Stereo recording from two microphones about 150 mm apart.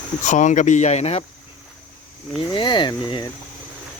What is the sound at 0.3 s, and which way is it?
Speech, 55° left (ahead or behind).